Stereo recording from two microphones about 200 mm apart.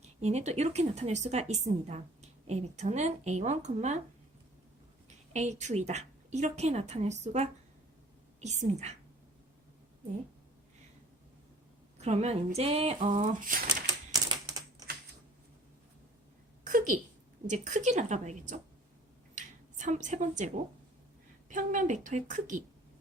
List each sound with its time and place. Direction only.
0.0 s a woman's voice: 30° right (ahead or behind)
5.0 s a woman's voice: 35° right (ahead or behind)
11.9 s a woman's voice: 35° right (ahead or behind)
14.1 s typing: 20° right (ahead or behind)
16.6 s a sound: 40° right (ahead or behind)
17.4 s a woman's voice: 35° right (ahead or behind)